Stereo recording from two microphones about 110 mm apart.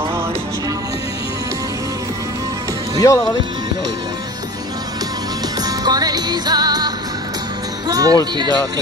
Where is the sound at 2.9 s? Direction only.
30° left (ahead or behind).